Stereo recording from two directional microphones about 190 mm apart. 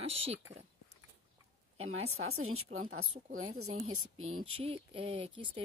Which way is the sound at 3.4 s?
90° right.